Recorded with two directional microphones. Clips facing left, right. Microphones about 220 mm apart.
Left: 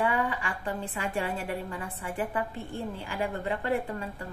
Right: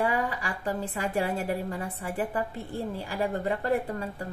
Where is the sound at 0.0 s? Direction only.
40° right (ahead or behind).